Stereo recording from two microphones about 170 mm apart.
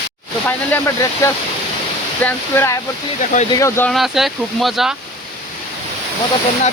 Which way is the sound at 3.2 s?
45° left (ahead or behind).